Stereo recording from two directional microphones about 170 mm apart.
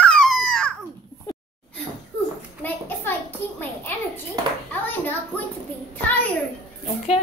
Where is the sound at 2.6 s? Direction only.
10° left (ahead or behind).